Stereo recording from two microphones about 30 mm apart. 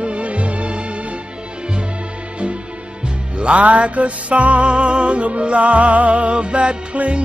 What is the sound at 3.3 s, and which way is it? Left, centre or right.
Music, right.